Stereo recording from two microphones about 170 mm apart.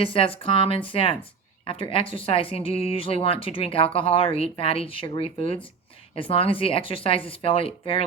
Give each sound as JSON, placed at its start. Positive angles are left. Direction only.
{"t": 0.0, "sound": "a woman's voice", "side_deg": 30}